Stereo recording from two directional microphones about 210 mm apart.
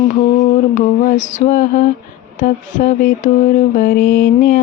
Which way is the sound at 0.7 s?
35° left (ahead or behind).